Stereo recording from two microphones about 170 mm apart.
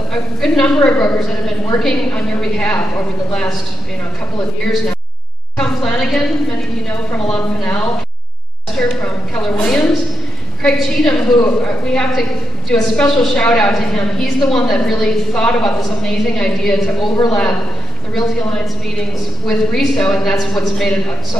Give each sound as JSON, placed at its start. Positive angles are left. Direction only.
{"t": 0.1, "sound": "a woman's voice", "side_deg": 5}
{"t": 5.6, "sound": "a woman's voice", "side_deg": 0}
{"t": 11.2, "sound": "a man's voice", "side_deg": 20}
{"t": 11.6, "sound": "a woman's voice", "side_deg": 5}
{"t": 19.4, "sound": "a woman's voice", "side_deg": 0}